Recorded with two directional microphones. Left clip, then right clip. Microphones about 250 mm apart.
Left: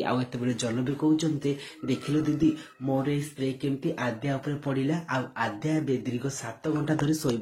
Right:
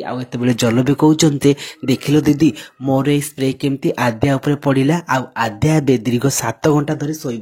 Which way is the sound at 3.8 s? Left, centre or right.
Right.